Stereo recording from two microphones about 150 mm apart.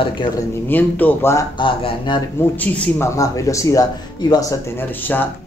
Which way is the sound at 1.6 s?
35° left (ahead or behind).